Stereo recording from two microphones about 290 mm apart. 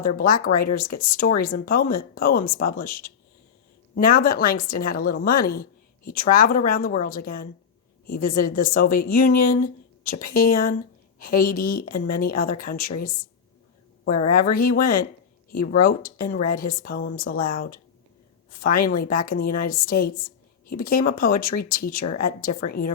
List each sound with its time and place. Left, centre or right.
0.2 s a woman's voice: left
14.3 s a woman's voice: left